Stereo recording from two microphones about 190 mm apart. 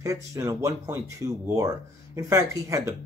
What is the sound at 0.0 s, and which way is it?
Speech, 15° right (ahead or behind).